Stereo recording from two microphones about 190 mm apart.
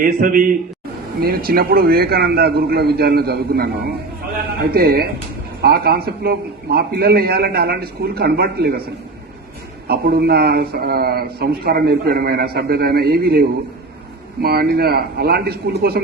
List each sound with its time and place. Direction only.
0.0 s a man's voice: 50° right (ahead or behind)
4.7 s a man's voice: 55° right (ahead or behind)
9.8 s a man's voice: 55° right (ahead or behind)